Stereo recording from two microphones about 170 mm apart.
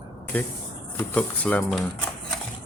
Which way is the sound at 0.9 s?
10° left (ahead or behind).